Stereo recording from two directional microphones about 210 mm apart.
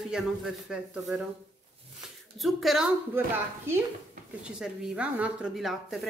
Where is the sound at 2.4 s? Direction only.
Centre (ahead or behind).